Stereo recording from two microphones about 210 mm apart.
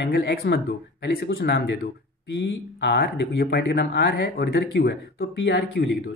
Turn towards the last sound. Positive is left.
turn(degrees=55)  # may be behind; listen again after turning